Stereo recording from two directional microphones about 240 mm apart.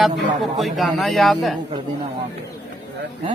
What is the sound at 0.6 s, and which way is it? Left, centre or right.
Speech, centre.